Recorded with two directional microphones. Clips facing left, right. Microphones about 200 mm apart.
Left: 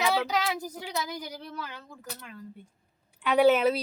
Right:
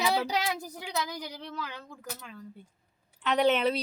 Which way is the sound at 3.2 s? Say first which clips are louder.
Left 4 dB; 5° left (ahead or behind).